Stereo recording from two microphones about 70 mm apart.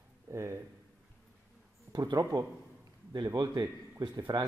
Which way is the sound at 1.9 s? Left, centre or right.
Right.